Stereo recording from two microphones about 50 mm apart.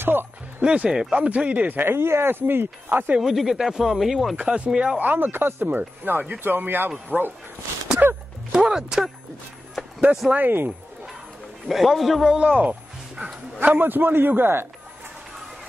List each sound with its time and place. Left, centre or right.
0.0 s speech: right
0.6 s speech: right
1.7 s speech: right
3.2 s speech: centre
4.4 s speech: centre
4.9 s speech: right
8.5 s speech: centre
10.3 s speech: right
11.6 s a man's voice: centre
12.3 s speech: centre
13.7 s speech: right